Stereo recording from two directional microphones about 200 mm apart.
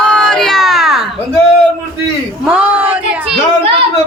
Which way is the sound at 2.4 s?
5° right (ahead or behind).